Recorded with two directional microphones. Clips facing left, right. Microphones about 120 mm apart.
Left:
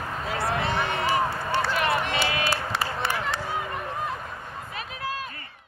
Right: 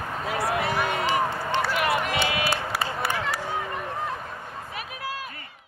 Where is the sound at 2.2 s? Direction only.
25° right (ahead or behind).